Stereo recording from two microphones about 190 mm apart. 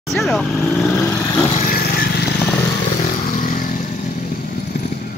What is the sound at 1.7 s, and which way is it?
Vehicle, 50° left (ahead or behind).